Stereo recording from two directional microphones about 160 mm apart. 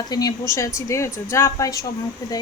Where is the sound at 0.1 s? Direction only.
25° left (ahead or behind).